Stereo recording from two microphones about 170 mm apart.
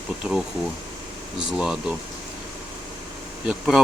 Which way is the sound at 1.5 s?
5° right (ahead or behind).